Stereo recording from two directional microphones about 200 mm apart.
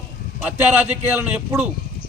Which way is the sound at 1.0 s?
10° right (ahead or behind).